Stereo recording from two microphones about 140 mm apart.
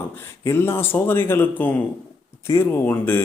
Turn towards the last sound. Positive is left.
turn(degrees=15)  # may be behind; listen again after turning